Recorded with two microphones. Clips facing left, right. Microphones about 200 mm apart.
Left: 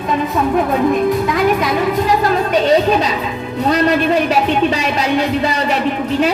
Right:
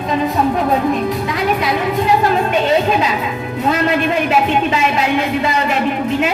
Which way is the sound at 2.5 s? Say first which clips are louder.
Left 2 dB; 35° left (ahead or behind).